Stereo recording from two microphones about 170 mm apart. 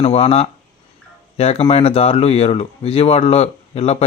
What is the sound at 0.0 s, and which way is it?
A man's voice, 40° left (ahead or behind).